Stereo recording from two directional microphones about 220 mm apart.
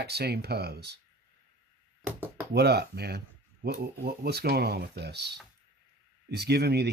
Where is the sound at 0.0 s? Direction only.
45° right (ahead or behind).